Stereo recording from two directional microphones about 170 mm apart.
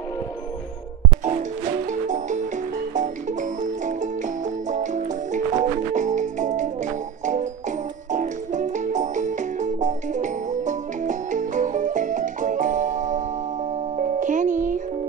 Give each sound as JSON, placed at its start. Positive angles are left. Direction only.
{"t": 1.9, "sound": "music", "side_deg": -45}
{"t": 8.1, "sound": "music", "side_deg": -45}